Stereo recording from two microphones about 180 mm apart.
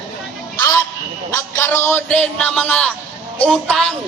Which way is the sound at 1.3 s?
15° left (ahead or behind).